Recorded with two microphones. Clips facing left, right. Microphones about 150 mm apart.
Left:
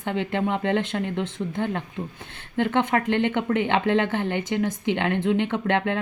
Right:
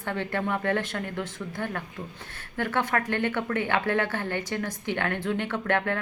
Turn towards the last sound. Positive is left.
turn(degrees=20)  # may be behind; listen again after turning